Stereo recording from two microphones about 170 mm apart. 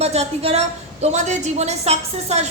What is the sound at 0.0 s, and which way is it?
A woman's voice, 40° right (ahead or behind).